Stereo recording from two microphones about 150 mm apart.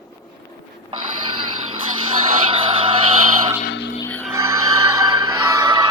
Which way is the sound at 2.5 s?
35° right (ahead or behind).